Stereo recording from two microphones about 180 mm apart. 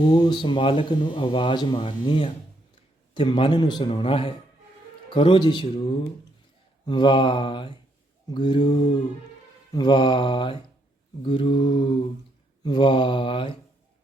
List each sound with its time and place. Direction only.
0.1 s speech: 25° left (ahead or behind)